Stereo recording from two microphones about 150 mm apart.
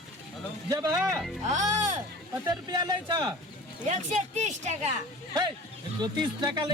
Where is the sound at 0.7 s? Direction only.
20° right (ahead or behind).